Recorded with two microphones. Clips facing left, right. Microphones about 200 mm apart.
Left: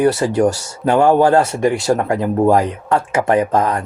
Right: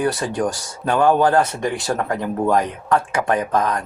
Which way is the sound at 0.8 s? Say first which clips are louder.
Left 4 dB; 25° left (ahead or behind).